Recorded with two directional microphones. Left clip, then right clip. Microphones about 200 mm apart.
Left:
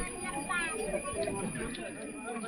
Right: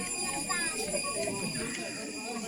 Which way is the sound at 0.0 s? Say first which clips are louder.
Right 2 dB; 35° right (ahead or behind).